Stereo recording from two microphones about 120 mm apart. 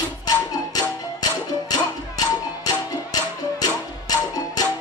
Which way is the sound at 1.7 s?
30° left (ahead or behind).